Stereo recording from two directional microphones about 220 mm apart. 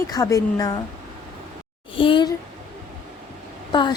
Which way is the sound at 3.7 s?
20° left (ahead or behind).